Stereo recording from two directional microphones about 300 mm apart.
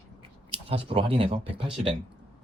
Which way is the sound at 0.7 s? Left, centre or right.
Centre.